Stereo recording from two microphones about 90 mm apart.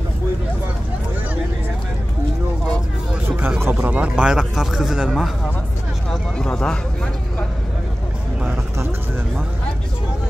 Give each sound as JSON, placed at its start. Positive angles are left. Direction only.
{"t": 3.3, "sound": "a sound", "side_deg": -25}
{"t": 3.8, "sound": "speech", "side_deg": -15}
{"t": 6.3, "sound": "speech", "side_deg": 10}